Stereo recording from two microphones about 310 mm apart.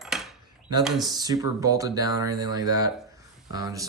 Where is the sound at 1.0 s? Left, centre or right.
Centre.